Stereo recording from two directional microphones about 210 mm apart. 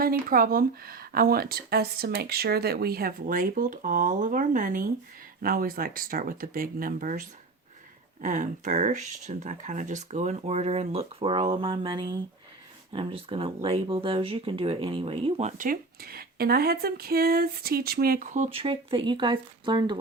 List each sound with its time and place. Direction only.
0.0 s speech: 45° right (ahead or behind); by 20.0 s 20° right (ahead or behind)